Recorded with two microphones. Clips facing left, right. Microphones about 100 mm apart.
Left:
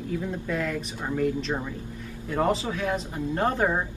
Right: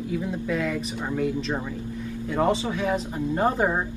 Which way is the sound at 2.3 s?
5° right (ahead or behind).